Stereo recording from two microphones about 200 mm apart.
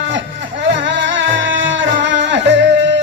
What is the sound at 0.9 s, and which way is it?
Music, 65° right (ahead or behind).